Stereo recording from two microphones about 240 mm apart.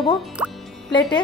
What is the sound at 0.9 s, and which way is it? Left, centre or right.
Speech, centre.